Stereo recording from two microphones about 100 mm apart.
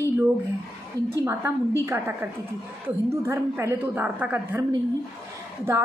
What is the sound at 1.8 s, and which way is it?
A woman's voice, 20° right (ahead or behind).